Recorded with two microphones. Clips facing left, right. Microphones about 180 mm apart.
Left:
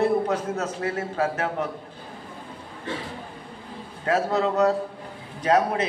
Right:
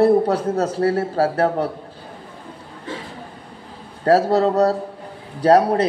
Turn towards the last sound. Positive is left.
turn(degrees=-35)  # may be behind; listen again after turning